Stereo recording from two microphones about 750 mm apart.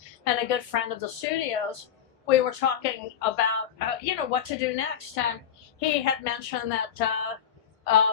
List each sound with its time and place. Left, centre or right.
0.3 s speech: left